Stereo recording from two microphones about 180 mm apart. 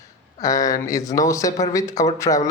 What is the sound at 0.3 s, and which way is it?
Speech, 20° left (ahead or behind).